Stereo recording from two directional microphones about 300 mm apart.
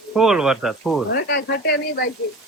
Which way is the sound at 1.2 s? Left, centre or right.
Left.